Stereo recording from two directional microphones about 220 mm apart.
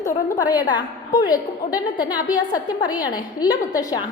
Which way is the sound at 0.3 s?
20° left (ahead or behind).